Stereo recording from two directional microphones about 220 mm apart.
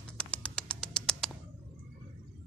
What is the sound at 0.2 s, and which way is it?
Bird, 5° left (ahead or behind).